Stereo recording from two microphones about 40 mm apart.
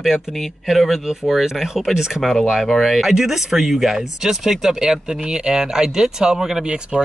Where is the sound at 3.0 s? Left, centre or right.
Centre.